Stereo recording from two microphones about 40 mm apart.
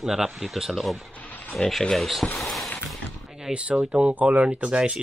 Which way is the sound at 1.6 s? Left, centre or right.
Centre.